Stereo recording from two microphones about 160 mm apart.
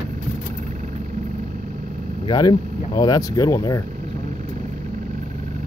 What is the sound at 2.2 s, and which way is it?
Speech, 25° left (ahead or behind).